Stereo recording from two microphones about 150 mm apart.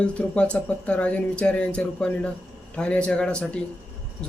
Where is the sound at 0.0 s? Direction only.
5° left (ahead or behind).